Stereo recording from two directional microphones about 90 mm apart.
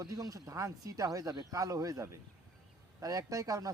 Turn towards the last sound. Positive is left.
turn(degrees=-40)  # may be behind; listen again after turning